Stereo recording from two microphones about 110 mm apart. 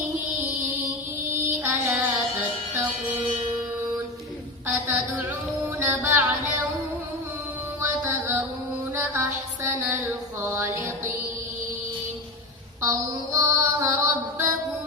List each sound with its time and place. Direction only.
1.3 s music: 25° right (ahead or behind)
4.6 s a sound: 25° right (ahead or behind)
7.8 s music: 20° right (ahead or behind)
9.6 s music: 20° right (ahead or behind)
12.8 s mantra: 30° right (ahead or behind)